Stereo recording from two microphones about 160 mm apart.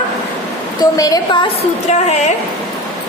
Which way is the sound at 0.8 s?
25° left (ahead or behind).